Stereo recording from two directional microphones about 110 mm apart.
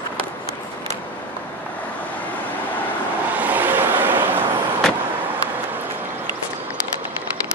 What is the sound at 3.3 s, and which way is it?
Vehicle, 15° right (ahead or behind).